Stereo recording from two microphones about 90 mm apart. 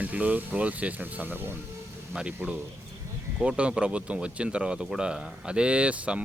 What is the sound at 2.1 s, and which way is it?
Speech, 10° right (ahead or behind).